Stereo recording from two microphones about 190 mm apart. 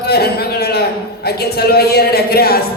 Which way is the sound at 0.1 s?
55° left (ahead or behind).